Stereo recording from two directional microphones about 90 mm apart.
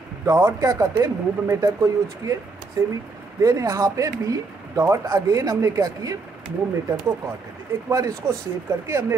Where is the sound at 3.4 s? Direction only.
40° right (ahead or behind).